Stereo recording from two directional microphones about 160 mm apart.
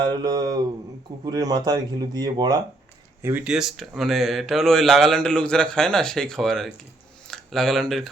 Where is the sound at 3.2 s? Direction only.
10° right (ahead or behind).